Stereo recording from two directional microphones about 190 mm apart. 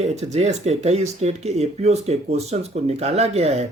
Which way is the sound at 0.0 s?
35° right (ahead or behind).